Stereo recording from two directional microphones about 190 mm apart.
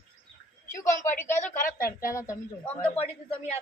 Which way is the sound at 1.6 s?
50° left (ahead or behind).